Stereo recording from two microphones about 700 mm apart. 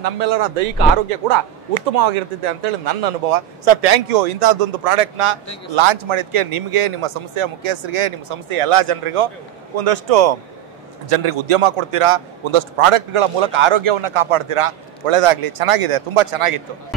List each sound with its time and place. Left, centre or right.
0.0 s speech: right
1.2 s speech: right
1.9 s a man's voice: right